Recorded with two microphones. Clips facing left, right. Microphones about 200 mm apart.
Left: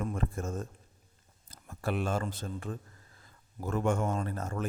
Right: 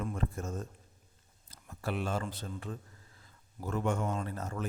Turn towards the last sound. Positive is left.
turn(degrees=50)  # may be behind; listen again after turning